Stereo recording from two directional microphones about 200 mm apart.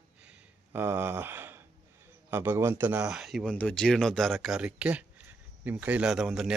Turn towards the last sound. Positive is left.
turn(degrees=0)  # may be behind; listen again after turning